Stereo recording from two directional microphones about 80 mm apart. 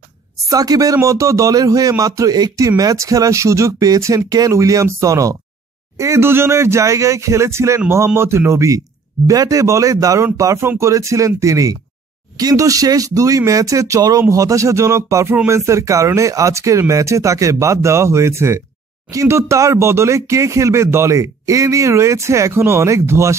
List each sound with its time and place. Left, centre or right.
0.5 s speech: right